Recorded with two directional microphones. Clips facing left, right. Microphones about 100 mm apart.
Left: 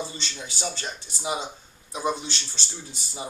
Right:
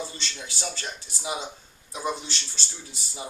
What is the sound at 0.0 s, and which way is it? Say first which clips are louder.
Speech: left 1 dB; 5° left (ahead or behind).